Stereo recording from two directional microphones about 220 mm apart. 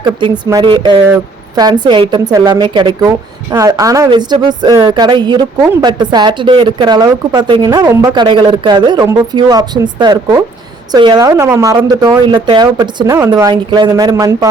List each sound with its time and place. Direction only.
0.0 s speech: 15° right (ahead or behind)